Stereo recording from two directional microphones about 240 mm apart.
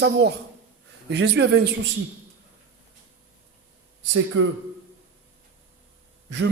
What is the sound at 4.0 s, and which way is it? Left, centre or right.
Speech, right.